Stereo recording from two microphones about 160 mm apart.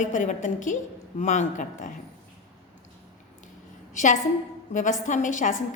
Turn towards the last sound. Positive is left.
turn(degrees=55)  # may be behind; listen again after turning